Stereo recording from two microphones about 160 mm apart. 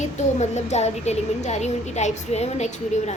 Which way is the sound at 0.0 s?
45° left (ahead or behind).